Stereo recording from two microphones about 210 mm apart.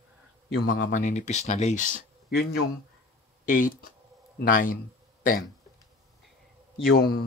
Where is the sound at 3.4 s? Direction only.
40° left (ahead or behind).